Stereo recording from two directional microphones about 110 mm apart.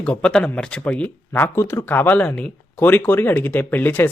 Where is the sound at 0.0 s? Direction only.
10° left (ahead or behind).